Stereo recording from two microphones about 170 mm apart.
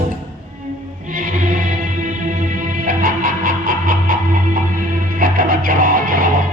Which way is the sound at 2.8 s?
55° right (ahead or behind).